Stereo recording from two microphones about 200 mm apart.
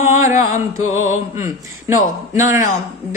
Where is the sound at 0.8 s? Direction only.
90° left.